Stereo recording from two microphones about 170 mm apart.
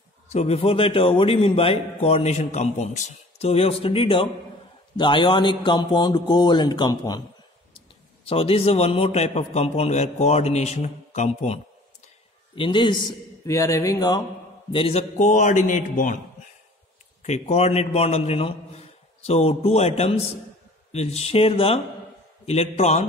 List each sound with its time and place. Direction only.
0.3 s a man's voice: 40° left (ahead or behind)
8.3 s a man's voice: 35° left (ahead or behind)
13.5 s speech: 20° left (ahead or behind)
14.7 s a man's voice: 35° left (ahead or behind); by 16.2 s 50° left (ahead or behind)
17.2 s a man's voice: 40° left (ahead or behind)